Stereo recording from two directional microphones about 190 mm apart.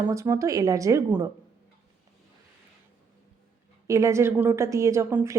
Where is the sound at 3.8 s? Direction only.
15° right (ahead or behind).